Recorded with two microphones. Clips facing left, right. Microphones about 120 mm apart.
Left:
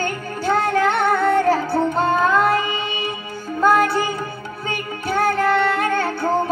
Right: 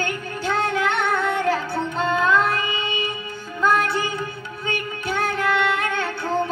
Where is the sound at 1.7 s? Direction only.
45° left (ahead or behind).